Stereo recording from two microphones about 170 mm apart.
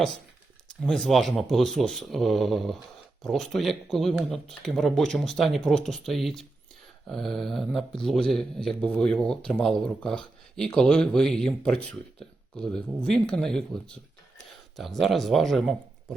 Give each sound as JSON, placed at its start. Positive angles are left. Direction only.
{"t": 0.8, "sound": "speech", "side_deg": 5}